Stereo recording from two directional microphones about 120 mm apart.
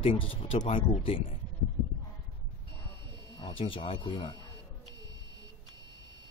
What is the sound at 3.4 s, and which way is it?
Speech, 50° left (ahead or behind).